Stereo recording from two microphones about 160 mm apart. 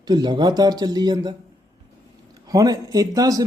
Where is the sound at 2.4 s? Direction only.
20° right (ahead or behind).